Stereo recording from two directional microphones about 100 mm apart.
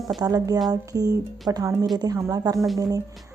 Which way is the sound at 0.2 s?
40° right (ahead or behind).